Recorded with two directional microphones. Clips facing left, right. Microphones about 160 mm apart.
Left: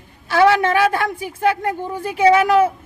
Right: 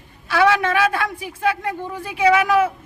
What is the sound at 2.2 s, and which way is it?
Speech, 25° left (ahead or behind).